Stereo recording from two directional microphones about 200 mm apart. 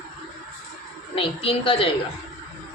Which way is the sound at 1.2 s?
25° left (ahead or behind).